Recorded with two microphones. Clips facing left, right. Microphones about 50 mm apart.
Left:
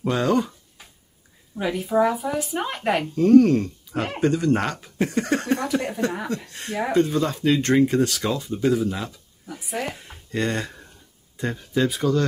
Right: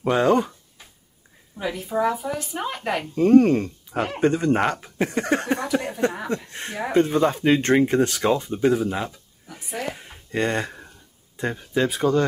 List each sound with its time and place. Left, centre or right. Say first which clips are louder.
0.0 s speech: right 3 dB; right
1.6 s speech: left 3 dB; centre
3.2 s speech: even; right
9.9 s a sound: right 1 dB; centre
11.3 s speech: right 1 dB; centre